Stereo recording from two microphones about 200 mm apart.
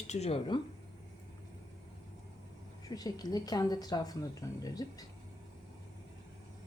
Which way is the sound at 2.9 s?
20° left (ahead or behind).